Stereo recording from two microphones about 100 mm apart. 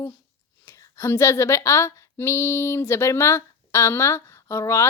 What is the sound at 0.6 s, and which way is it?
Speech, 30° left (ahead or behind).